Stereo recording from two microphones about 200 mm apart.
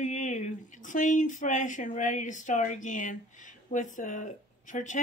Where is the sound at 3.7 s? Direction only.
40° left (ahead or behind).